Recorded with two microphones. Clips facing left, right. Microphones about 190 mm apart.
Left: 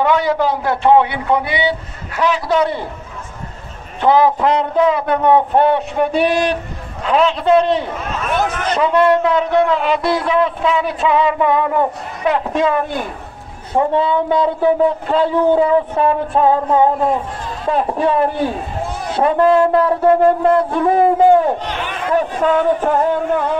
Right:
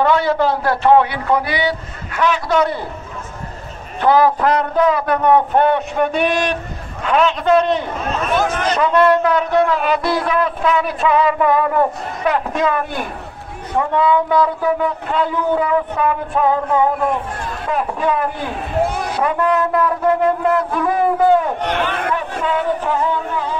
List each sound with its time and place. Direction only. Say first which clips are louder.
0.0 s a man's voice: even; 15° left (ahead or behind)
4.0 s a man's voice: left 1 dB; 20° left (ahead or behind)
12.5 s a man's voice: left 2 dB; 25° left (ahead or behind)
18.6 s a sound: right 5 dB; 70° right (ahead or behind)
19.1 s speech: left 7 dB; 30° left (ahead or behind)
21.5 s speech: right 4 dB; 60° right (ahead or behind)
22.1 s speech: left 5 dB; 45° left (ahead or behind)